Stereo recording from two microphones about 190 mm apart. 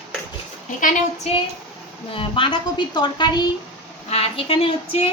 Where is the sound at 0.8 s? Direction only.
40° left (ahead or behind).